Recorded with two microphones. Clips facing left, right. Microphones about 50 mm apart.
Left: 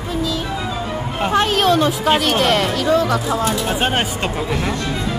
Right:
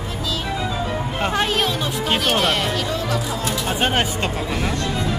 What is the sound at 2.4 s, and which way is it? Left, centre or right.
Speech, left.